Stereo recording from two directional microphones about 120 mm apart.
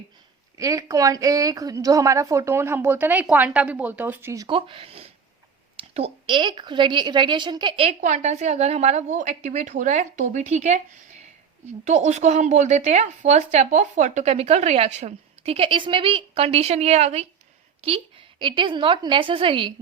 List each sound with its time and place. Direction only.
0.5 s a woman's voice: 30° right (ahead or behind)
4.4 s a woman's voice: 50° right (ahead or behind)
6.3 s a woman's voice: 40° right (ahead or behind)
8.0 s a woman's voice: 75° right (ahead or behind)
17.8 s a woman's voice: 45° right (ahead or behind)